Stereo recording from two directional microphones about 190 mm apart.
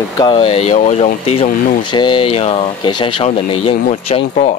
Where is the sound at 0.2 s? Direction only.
30° left (ahead or behind).